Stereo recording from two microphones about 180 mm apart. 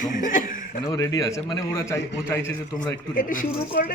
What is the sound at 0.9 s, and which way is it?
A man's voice, 20° left (ahead or behind).